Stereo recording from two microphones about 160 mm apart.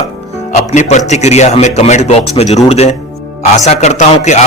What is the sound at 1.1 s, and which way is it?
A man's voice, 45° left (ahead or behind).